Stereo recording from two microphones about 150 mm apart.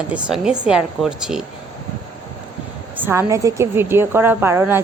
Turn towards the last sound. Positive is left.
turn(degrees=-15)  # may be behind; listen again after turning